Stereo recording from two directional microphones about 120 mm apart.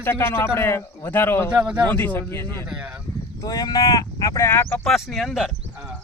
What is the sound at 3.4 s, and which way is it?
Speech, 30° left (ahead or behind).